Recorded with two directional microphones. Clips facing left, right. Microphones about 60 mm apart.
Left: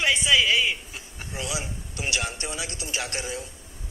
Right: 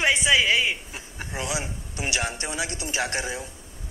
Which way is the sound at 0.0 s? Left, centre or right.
Right.